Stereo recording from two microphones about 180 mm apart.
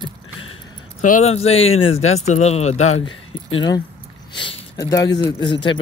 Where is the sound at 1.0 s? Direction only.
45° left (ahead or behind).